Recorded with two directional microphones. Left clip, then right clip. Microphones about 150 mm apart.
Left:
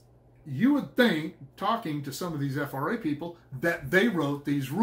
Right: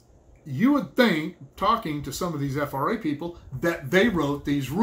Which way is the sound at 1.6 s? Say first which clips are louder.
Right 5 dB; 20° right (ahead or behind).